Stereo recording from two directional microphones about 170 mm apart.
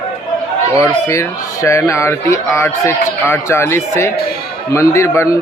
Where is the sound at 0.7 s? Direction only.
20° left (ahead or behind).